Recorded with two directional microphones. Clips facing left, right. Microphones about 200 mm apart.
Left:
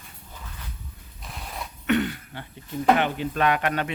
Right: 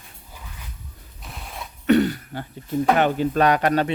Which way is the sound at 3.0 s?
40° right (ahead or behind).